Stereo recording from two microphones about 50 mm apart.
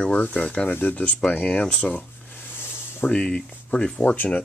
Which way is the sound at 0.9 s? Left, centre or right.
Left.